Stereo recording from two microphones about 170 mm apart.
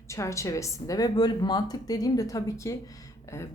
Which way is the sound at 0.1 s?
15° left (ahead or behind).